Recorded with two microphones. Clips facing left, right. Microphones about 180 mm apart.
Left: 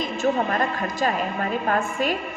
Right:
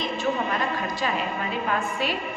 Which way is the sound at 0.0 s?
45° left (ahead or behind).